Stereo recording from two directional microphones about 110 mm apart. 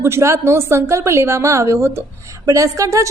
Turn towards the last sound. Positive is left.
turn(degrees=-30)  # may be behind; listen again after turning